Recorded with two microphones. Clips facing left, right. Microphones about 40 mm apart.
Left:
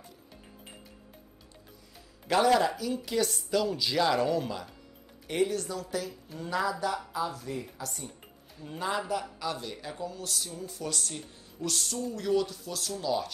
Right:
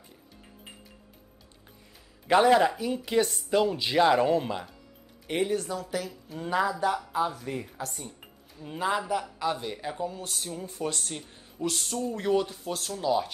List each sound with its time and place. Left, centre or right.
2.2 s a man's voice: right
8.6 s a man's voice: centre; by 12.9 s right
12.9 s speech: right